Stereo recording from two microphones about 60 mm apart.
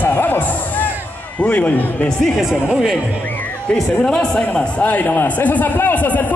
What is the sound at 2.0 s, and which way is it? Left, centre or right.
Speech, centre.